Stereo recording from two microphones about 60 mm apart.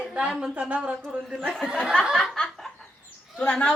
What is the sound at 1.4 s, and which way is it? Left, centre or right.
Speech, centre.